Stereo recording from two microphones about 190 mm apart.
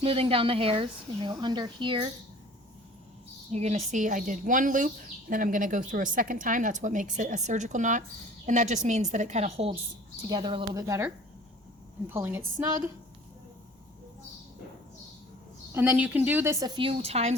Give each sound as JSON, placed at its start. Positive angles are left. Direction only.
{"t": 0.0, "sound": "a woman's voice", "side_deg": -30}
{"t": 3.5, "sound": "a woman's voice", "side_deg": -35}
{"t": 10.2, "sound": "a woman's voice", "side_deg": -25}
{"t": 15.7, "sound": "a woman's voice", "side_deg": -10}